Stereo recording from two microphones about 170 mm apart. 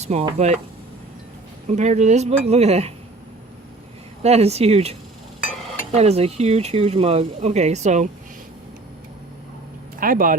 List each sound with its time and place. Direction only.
0.0 s speech: 40° right (ahead or behind)
1.6 s speech: 45° right (ahead or behind)
4.2 s speech: 40° right (ahead or behind)
10.0 s speech: 55° right (ahead or behind)